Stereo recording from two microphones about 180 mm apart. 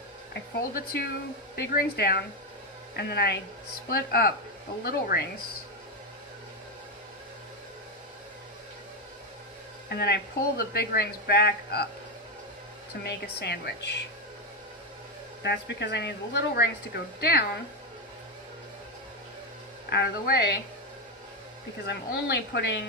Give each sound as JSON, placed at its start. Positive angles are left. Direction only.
{"t": 0.3, "sound": "speech", "side_deg": 60}
{"t": 9.8, "sound": "speech", "side_deg": 65}
{"t": 13.0, "sound": "speech", "side_deg": 65}
{"t": 15.4, "sound": "speech", "side_deg": 70}
{"t": 19.9, "sound": "speech", "side_deg": 65}
{"t": 21.8, "sound": "speech", "side_deg": 70}